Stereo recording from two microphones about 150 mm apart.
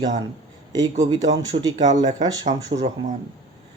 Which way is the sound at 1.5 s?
60° right (ahead or behind).